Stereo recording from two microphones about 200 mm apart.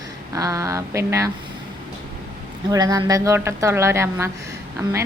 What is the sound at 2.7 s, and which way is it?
A woman's voice, 20° right (ahead or behind).